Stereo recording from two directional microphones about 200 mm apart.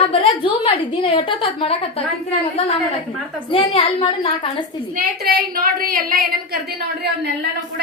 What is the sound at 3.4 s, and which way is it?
A woman's voice, 25° left (ahead or behind).